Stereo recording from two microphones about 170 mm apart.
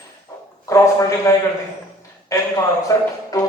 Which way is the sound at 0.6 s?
20° left (ahead or behind).